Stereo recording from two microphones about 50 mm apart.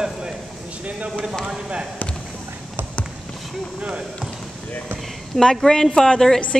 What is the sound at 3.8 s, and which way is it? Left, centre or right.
Speech, right.